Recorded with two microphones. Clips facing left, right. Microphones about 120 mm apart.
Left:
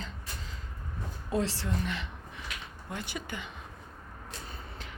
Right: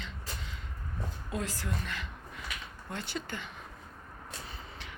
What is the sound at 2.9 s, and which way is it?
Speech, 15° left (ahead or behind).